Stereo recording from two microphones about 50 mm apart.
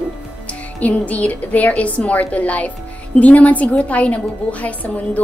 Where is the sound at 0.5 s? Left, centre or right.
Left.